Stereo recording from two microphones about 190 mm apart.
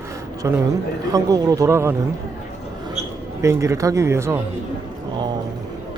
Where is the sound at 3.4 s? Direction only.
15° right (ahead or behind).